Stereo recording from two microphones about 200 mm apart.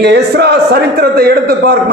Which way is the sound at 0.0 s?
55° right (ahead or behind).